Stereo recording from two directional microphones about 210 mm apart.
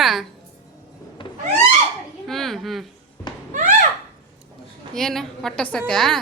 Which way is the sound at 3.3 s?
20° left (ahead or behind).